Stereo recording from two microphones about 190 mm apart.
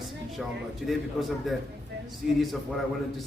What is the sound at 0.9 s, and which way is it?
A man's voice, centre (ahead or behind).